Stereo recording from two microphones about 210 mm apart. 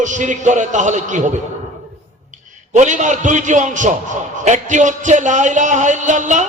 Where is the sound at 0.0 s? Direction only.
35° right (ahead or behind).